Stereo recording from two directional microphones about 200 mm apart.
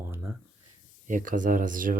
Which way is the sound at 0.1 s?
15° right (ahead or behind).